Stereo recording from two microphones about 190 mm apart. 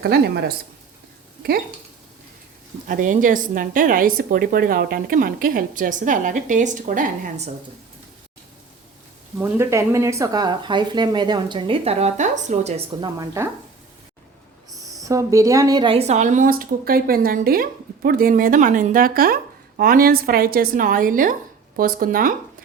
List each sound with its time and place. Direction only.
0.0 s speech: 60° right (ahead or behind)
2.8 s speech: 45° right (ahead or behind)
9.4 s speech: 15° right (ahead or behind); by 12.8 s 35° right (ahead or behind)
13.0 s a woman's voice: 15° right (ahead or behind)
14.9 s speech: 15° right (ahead or behind); by 22.4 s 45° right (ahead or behind)